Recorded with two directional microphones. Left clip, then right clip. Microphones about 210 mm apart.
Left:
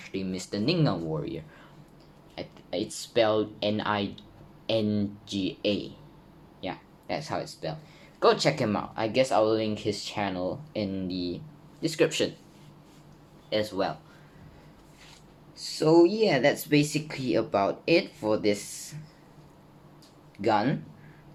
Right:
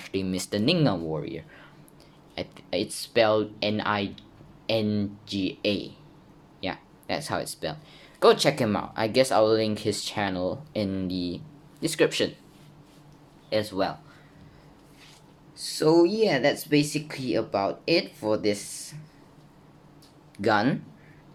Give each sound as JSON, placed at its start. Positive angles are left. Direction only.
{"t": 0.0, "sound": "speech", "side_deg": -55}
{"t": 1.1, "sound": "speech", "side_deg": -10}
{"t": 2.3, "sound": "speech", "side_deg": -30}
{"t": 6.6, "sound": "speech", "side_deg": -20}
{"t": 13.5, "sound": "speech", "side_deg": -20}
{"t": 15.5, "sound": "speech", "side_deg": -15}
{"t": 20.3, "sound": "speech", "side_deg": -30}